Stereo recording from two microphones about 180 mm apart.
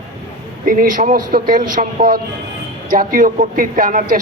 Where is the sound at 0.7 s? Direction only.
50° right (ahead or behind).